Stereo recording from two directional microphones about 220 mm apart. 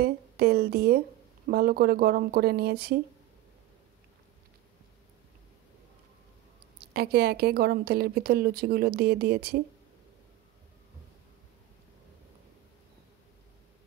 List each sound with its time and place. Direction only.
0.0 s a woman's voice: 45° right (ahead or behind)
6.8 s speech: 45° right (ahead or behind)